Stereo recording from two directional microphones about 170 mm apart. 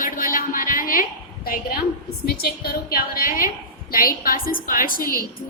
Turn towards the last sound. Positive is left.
turn(degrees=55)  # may be behind; listen again after turning